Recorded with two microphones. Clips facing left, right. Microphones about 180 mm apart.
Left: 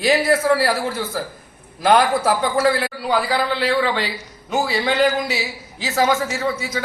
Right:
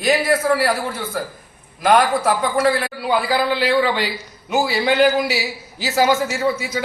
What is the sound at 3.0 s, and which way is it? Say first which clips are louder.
A man's voice: right 2 dB; centre (ahead or behind).